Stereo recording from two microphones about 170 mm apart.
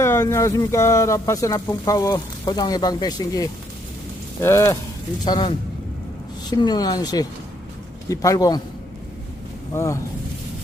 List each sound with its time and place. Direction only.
0.0 s speech: 15° left (ahead or behind)
5.2 s speech: 25° left (ahead or behind)
9.7 s speech: 15° left (ahead or behind)